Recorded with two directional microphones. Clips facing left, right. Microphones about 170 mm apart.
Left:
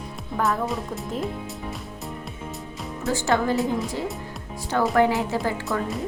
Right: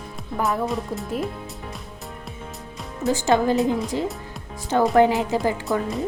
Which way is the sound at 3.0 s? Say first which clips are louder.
Right 3 dB; 20° right (ahead or behind).